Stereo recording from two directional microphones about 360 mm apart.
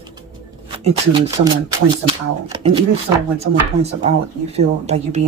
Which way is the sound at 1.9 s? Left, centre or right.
Centre.